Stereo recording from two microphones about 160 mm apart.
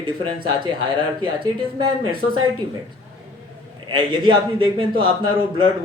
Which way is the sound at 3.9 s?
30° right (ahead or behind).